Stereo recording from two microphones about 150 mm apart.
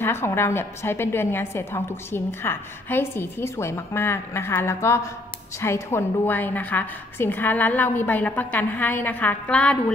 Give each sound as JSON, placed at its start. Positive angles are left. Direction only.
{"t": 0.0, "sound": "a woman's voice", "side_deg": 15}